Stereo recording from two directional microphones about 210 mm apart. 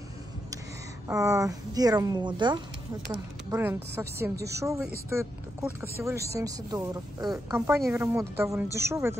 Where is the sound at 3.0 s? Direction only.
5° right (ahead or behind).